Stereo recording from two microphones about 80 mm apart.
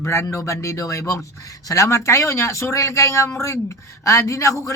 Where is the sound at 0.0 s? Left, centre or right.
Left.